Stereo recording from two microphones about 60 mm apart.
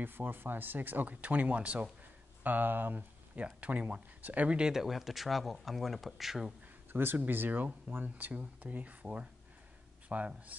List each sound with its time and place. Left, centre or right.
0.0 s speech: right; by 6.5 s centre
6.9 s speech: right